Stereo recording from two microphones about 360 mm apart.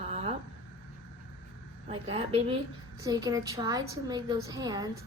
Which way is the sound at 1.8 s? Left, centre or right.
Centre.